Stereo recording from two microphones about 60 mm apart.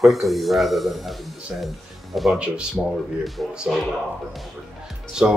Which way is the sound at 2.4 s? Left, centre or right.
Centre.